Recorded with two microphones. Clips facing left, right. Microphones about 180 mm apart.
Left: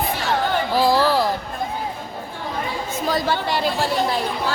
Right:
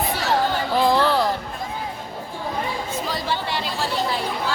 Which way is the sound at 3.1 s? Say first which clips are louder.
Left 7 dB; 45° left (ahead or behind).